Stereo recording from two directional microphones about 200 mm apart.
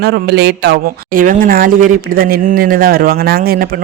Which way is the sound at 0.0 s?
55° right (ahead or behind).